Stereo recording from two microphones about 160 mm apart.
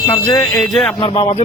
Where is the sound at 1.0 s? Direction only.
30° left (ahead or behind).